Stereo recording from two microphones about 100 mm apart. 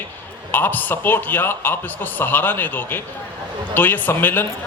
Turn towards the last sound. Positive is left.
turn(degrees=20)  # may be behind; listen again after turning